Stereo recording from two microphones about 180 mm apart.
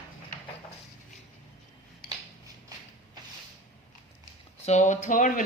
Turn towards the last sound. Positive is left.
turn(degrees=45)  # may be behind; listen again after turning